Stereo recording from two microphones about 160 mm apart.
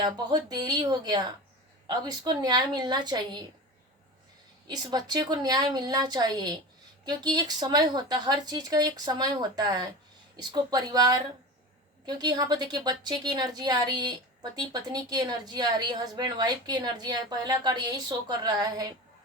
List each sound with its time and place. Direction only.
0.0 s a woman's voice: 25° right (ahead or behind)
4.7 s a woman's voice: 25° right (ahead or behind)